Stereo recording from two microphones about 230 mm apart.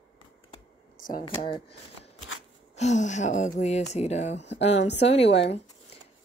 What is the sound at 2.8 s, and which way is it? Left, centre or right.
Speech, left.